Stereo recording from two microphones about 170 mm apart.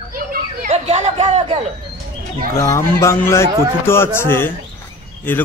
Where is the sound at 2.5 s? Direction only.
20° left (ahead or behind).